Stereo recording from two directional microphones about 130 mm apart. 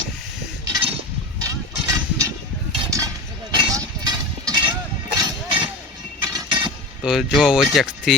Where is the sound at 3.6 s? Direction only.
30° right (ahead or behind).